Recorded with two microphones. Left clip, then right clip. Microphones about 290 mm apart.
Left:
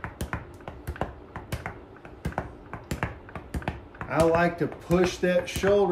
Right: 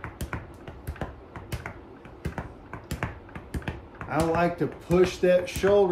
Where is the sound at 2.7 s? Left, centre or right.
Centre.